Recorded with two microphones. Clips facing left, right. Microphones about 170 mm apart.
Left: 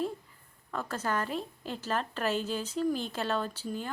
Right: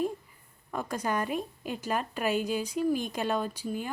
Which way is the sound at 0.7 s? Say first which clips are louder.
Right 2 dB; 15° right (ahead or behind).